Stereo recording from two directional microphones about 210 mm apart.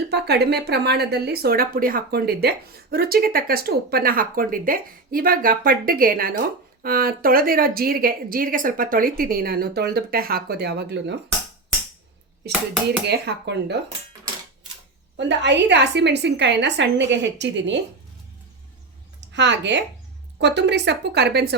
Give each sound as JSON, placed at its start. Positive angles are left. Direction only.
{"t": 0.1, "sound": "a woman's voice", "side_deg": -50}
{"t": 12.4, "sound": "a woman's voice", "side_deg": -50}
{"t": 15.2, "sound": "a woman's voice", "side_deg": -55}
{"t": 19.3, "sound": "a woman's voice", "side_deg": -55}